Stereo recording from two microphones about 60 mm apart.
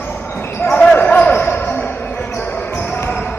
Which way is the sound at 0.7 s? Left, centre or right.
Left.